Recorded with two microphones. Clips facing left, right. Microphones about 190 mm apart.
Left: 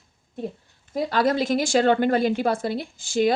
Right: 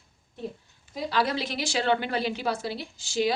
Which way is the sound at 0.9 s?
50° left (ahead or behind).